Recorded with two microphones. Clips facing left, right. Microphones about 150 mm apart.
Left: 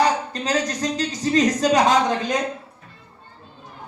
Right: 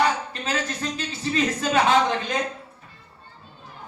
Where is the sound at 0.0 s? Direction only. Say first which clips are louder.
Left 3 dB; 40° left (ahead or behind).